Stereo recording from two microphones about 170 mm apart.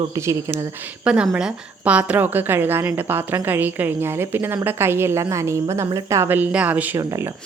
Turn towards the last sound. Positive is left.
turn(degrees=-15)  # may be behind; listen again after turning